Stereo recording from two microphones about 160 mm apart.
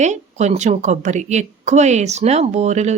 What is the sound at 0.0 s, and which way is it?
A woman's voice, 45° right (ahead or behind).